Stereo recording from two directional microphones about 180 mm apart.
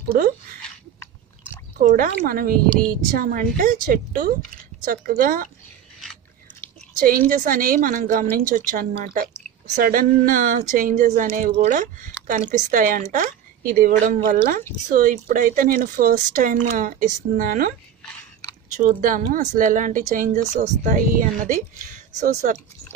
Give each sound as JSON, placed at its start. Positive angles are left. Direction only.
{"t": 1.8, "sound": "speech", "side_deg": -50}
{"t": 7.0, "sound": "speech", "side_deg": -50}
{"t": 18.8, "sound": "speech", "side_deg": -45}